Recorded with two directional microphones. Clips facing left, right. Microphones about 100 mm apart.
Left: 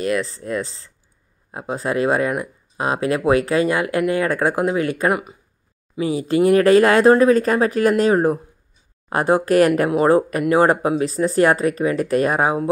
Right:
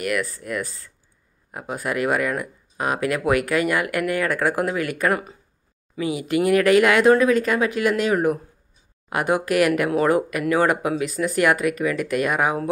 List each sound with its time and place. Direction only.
0.0 s speech: 25° left (ahead or behind)
5.9 s speech: 30° left (ahead or behind)